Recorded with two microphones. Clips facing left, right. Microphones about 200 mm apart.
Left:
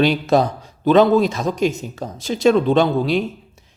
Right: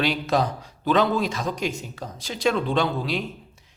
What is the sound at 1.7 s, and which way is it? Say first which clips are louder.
Speech: left 6 dB; 25° left (ahead or behind).